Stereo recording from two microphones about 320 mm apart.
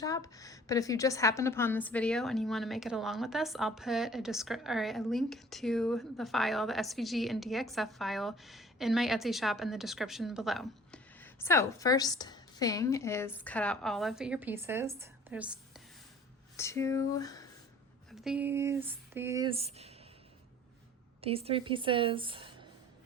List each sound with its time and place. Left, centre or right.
0.0 s a woman's voice: centre
16.6 s speech: centre
18.1 s speech: centre
21.2 s a woman's voice: centre